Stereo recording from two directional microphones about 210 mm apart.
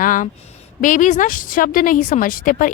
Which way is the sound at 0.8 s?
40° left (ahead or behind).